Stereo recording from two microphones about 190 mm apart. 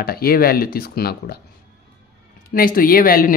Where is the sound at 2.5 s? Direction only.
50° left (ahead or behind).